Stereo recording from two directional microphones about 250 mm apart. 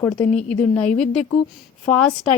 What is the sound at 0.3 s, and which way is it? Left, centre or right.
Speech, left.